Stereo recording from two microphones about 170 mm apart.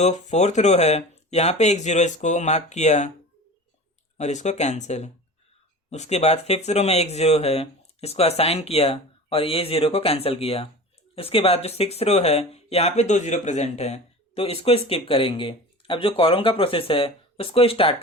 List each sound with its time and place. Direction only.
0.0 s speech: 45° left (ahead or behind)
4.2 s speech: 45° left (ahead or behind)